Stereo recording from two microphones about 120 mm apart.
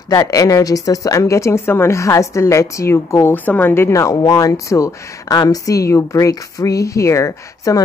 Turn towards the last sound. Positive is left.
turn(degrees=25)  # may be behind; listen again after turning